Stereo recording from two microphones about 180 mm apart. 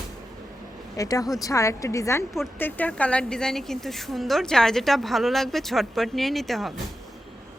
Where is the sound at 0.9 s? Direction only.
20° left (ahead or behind); by 6.7 s centre (ahead or behind).